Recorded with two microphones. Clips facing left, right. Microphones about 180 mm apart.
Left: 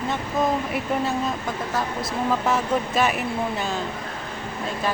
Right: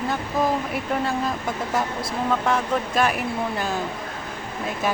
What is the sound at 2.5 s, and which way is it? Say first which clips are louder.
Speech: even; centre (ahead or behind).